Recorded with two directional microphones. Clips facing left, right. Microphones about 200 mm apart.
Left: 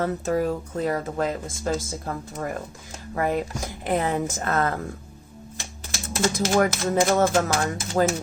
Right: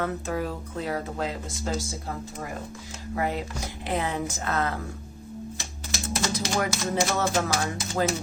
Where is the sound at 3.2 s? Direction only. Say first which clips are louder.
Left 4 dB; 50° left (ahead or behind).